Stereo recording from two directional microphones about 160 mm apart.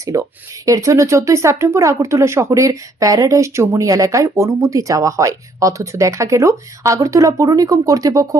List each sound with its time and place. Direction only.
0.0 s speech: 20° right (ahead or behind)